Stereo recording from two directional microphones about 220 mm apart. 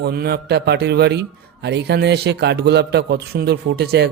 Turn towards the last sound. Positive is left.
turn(degrees=-45)  # may be behind; listen again after turning